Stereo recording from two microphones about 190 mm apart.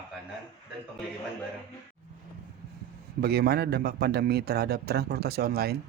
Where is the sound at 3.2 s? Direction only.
55° right (ahead or behind).